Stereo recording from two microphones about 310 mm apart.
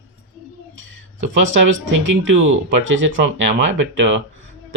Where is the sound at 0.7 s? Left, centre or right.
Right.